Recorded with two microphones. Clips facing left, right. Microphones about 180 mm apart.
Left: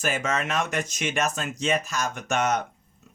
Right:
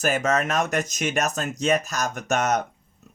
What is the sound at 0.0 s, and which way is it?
Speech, 40° right (ahead or behind).